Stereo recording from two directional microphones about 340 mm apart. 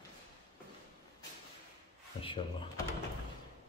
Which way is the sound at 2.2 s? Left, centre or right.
Centre.